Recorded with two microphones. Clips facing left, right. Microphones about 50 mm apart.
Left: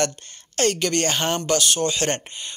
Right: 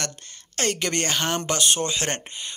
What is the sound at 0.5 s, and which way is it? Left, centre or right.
Speech, centre.